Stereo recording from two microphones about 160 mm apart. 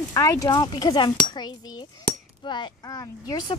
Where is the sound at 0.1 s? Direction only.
20° left (ahead or behind).